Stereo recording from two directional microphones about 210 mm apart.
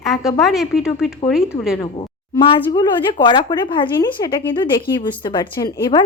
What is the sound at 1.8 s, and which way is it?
Speech, 25° left (ahead or behind).